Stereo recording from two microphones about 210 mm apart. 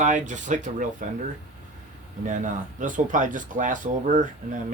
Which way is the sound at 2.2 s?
35° right (ahead or behind).